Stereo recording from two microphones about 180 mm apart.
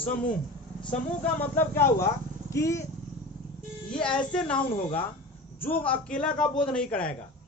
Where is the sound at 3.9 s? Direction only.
5° left (ahead or behind).